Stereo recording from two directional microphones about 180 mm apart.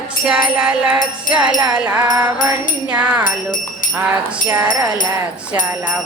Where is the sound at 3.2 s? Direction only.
45° left (ahead or behind).